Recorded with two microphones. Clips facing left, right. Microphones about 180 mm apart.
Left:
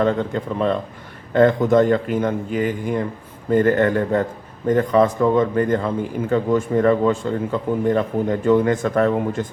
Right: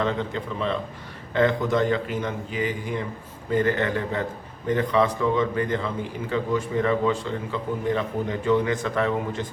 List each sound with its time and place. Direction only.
0.0 s a man's voice: 45° left (ahead or behind)